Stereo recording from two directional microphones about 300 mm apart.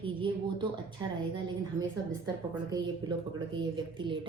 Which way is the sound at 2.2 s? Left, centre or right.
Centre.